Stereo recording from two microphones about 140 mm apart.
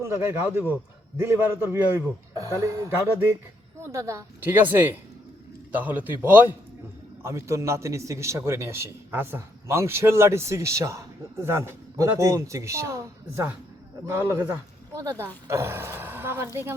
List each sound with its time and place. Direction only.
0.0 s a man's voice: 15° right (ahead or behind)